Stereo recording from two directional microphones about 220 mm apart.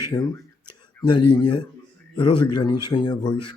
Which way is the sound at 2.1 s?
20° left (ahead or behind).